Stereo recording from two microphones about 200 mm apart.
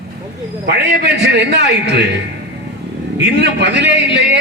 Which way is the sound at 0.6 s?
55° right (ahead or behind).